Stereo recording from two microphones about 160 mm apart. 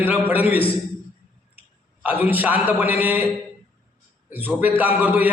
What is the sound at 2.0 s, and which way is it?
A man's voice, 10° right (ahead or behind).